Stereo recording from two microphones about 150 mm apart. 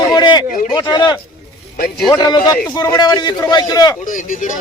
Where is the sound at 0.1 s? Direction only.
30° left (ahead or behind).